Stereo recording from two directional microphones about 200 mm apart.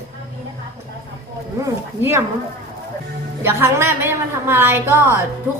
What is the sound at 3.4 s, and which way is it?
A woman's voice, 10° right (ahead or behind).